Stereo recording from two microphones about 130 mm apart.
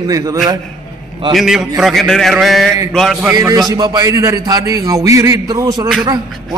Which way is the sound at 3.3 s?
25° right (ahead or behind).